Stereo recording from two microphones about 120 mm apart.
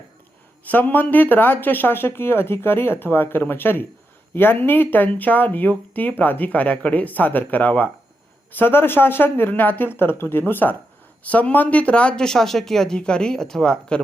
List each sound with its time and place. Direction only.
0.6 s speech: 15° left (ahead or behind)